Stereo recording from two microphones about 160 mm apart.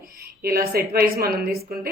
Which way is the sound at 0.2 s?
70° right (ahead or behind).